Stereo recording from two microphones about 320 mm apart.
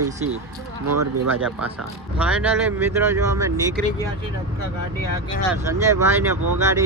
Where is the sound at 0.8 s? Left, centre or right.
Right.